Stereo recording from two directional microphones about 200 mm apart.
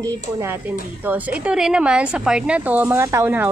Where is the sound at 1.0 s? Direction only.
5° right (ahead or behind).